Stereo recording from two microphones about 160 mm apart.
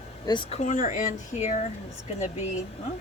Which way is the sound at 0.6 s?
50° left (ahead or behind).